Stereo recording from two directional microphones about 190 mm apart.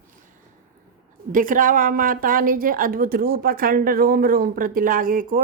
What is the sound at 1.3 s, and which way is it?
A woman's voice, 45° right (ahead or behind).